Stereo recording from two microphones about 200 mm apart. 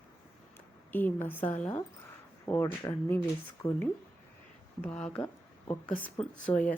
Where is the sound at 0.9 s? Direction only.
10° left (ahead or behind).